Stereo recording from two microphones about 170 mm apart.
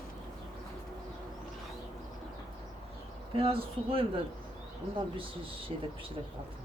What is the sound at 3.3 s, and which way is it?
Speech, 35° right (ahead or behind).